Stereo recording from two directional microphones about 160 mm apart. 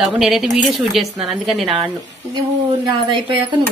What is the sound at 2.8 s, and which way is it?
Speech, 30° right (ahead or behind).